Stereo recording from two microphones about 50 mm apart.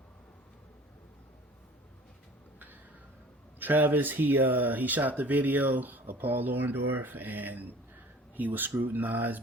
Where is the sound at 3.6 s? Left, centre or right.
Right.